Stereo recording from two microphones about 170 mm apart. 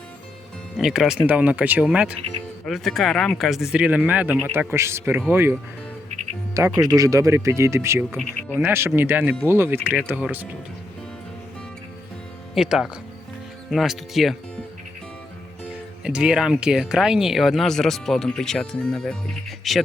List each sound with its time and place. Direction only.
0.8 s speech: 5° right (ahead or behind)
6.7 s speech: 20° right (ahead or behind)
12.5 s speech: centre (ahead or behind)
16.0 s speech: 5° right (ahead or behind)